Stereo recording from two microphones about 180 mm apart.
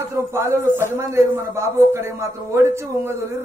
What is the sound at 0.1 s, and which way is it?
A woman's voice, 15° right (ahead or behind).